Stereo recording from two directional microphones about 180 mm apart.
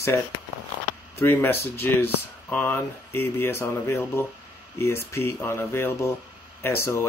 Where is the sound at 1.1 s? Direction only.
15° left (ahead or behind).